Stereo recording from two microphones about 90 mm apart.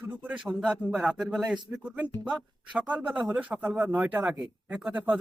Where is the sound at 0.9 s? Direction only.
5° right (ahead or behind).